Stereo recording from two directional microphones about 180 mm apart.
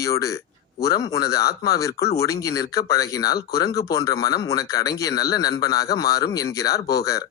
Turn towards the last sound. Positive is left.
turn(degrees=20)  # may be behind; listen again after turning